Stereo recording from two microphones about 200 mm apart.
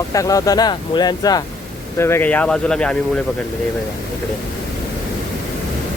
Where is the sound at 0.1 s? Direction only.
15° left (ahead or behind).